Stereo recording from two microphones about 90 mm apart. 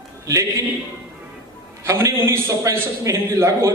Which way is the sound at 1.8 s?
30° right (ahead or behind).